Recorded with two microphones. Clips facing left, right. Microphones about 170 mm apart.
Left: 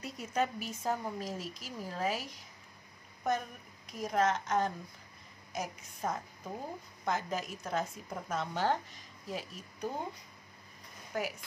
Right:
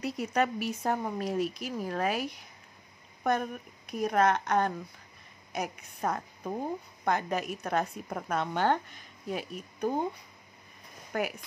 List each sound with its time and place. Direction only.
0.0 s a woman's voice: 70° right (ahead or behind)
11.1 s a woman's voice: 65° right (ahead or behind)